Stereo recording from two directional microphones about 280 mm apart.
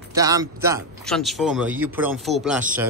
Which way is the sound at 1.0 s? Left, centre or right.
Centre.